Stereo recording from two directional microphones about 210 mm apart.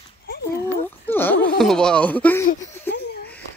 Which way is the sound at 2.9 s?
50° left (ahead or behind).